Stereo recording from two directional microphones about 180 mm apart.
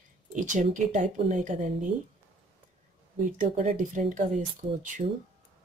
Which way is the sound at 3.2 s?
45° right (ahead or behind).